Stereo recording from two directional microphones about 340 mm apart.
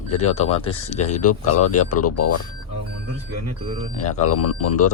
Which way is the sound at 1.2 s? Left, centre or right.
Left.